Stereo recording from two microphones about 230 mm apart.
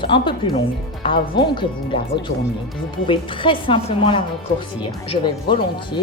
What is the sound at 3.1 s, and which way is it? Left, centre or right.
A woman's voice, left.